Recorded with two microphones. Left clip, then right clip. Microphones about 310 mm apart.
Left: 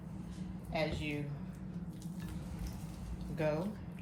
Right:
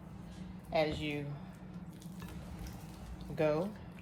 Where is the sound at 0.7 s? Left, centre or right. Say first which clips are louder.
Right 4 dB; right.